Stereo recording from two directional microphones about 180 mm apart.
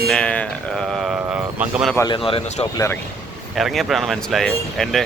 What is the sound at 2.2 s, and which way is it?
Speech, 30° left (ahead or behind).